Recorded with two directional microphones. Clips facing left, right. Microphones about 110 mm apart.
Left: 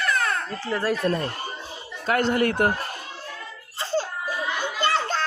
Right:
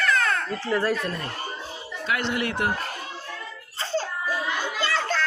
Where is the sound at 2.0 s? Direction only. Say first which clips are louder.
Left 5 dB; 45° left (ahead or behind).